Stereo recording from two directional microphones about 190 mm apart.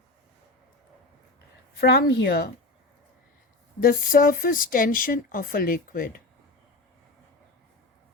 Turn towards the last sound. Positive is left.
turn(degrees=50)  # may be behind; listen again after turning